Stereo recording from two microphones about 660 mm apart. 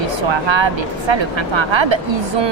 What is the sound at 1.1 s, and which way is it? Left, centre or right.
Speech, right.